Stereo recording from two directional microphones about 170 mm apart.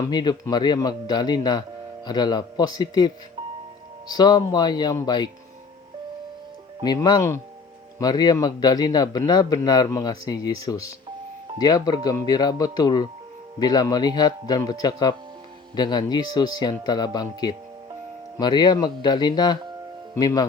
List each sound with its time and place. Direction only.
0.1 s a man's voice: 25° left (ahead or behind)
4.1 s a man's voice: 25° left (ahead or behind)
6.8 s a man's voice: 25° left (ahead or behind)